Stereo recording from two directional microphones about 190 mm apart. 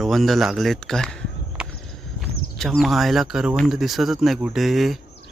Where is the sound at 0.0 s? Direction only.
Centre (ahead or behind).